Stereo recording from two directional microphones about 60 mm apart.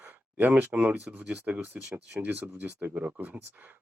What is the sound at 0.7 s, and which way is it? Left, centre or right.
Speech, centre.